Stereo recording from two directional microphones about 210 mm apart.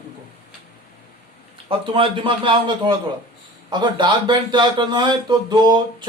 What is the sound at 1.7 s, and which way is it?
Speech, 25° right (ahead or behind).